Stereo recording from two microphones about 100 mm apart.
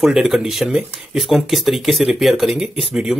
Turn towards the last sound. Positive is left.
turn(degrees=-5)  # may be behind; listen again after turning